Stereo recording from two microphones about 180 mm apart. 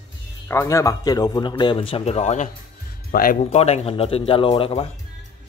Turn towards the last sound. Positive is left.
turn(degrees=30)  # may be behind; listen again after turning